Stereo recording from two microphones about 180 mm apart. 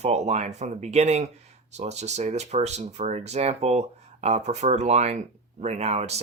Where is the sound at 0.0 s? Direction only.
40° right (ahead or behind).